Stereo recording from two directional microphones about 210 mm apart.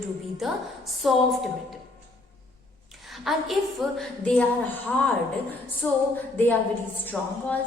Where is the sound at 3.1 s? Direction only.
Centre (ahead or behind).